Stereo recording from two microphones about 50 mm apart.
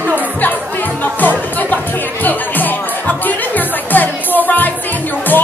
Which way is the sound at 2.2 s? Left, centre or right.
Left.